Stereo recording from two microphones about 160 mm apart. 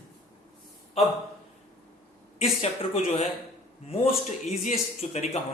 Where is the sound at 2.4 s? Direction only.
40° left (ahead or behind).